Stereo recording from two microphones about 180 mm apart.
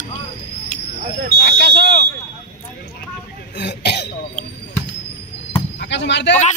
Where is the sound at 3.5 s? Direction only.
70° left (ahead or behind).